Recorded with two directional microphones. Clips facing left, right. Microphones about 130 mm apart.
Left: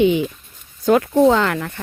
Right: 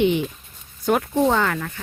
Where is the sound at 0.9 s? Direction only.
90° left.